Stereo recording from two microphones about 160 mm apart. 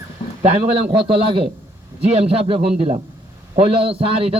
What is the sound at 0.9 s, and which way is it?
A man's voice, 35° right (ahead or behind).